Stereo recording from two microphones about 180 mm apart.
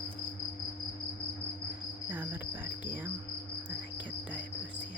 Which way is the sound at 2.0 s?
10° right (ahead or behind).